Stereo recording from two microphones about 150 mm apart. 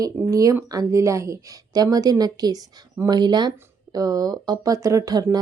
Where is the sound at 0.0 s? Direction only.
20° right (ahead or behind).